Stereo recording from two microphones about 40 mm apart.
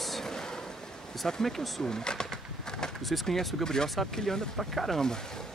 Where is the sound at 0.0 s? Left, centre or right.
Centre.